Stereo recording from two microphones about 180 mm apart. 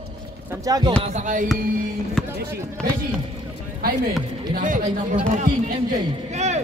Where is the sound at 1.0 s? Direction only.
45° right (ahead or behind).